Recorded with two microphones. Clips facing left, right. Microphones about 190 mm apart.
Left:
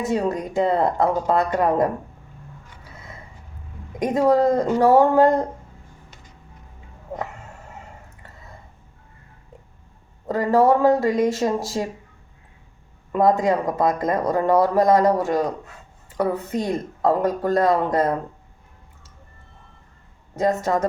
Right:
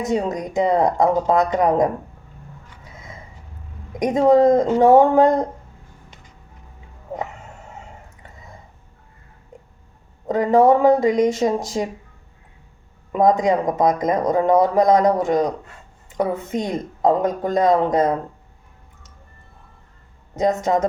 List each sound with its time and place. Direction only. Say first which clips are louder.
0.3 s speech: right 1 dB; 15° right (ahead or behind)
3.9 s speech: right 3 dB; 20° right (ahead or behind)
10.2 s speech: right 3 dB; 15° right (ahead or behind)
13.4 s speech: right 2 dB; 15° right (ahead or behind)
20.3 s speech: right 2 dB; 20° right (ahead or behind)